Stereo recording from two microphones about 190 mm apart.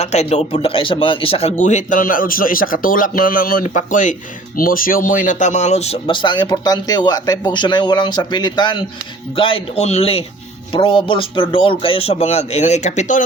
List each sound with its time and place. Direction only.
0.0 s speech: 35° left (ahead or behind)